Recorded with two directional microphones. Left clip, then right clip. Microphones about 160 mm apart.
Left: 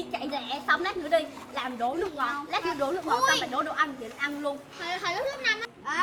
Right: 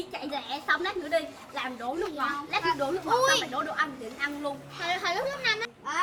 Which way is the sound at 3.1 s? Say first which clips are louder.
Right 1 dB; 20° right (ahead or behind).